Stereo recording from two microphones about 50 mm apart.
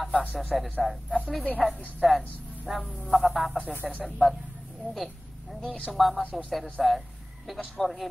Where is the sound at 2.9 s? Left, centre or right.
Centre.